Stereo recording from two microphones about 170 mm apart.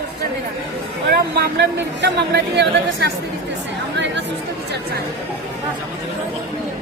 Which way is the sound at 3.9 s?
90° right.